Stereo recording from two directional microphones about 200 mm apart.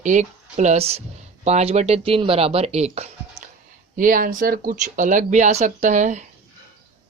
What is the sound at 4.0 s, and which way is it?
Speech, 45° right (ahead or behind).